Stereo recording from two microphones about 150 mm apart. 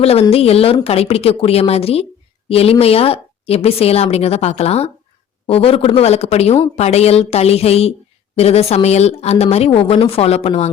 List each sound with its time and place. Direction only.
0.0 s a woman's voice: 40° left (ahead or behind)